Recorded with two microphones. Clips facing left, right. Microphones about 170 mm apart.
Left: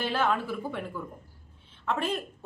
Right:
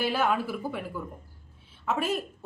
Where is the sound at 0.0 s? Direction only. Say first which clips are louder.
Right 1 dB; 10° right (ahead or behind).